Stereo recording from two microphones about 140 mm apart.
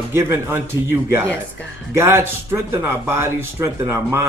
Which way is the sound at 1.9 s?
20° right (ahead or behind).